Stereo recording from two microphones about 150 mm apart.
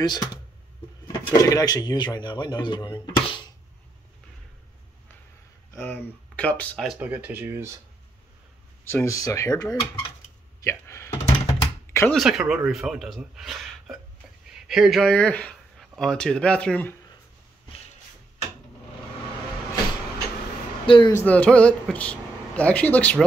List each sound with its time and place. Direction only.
0.0 s speech: 30° left (ahead or behind)
5.7 s speech: 10° left (ahead or behind)
6.9 s speech: 10° right (ahead or behind)
8.8 s speech: 20° left (ahead or behind)
10.6 s a sound: 20° left (ahead or behind)
12.1 s speech: centre (ahead or behind)
20.8 s speech: 35° left (ahead or behind)
21.3 s speech: 10° left (ahead or behind)